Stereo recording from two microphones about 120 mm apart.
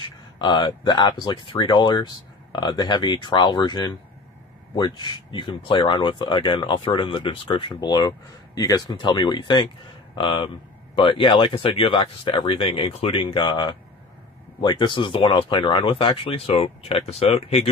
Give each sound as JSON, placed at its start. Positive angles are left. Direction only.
{"t": 0.3, "sound": "speech", "side_deg": 40}
{"t": 7.8, "sound": "speech", "side_deg": 35}